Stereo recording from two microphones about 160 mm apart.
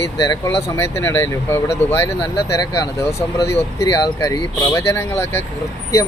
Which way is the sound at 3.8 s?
20° left (ahead or behind).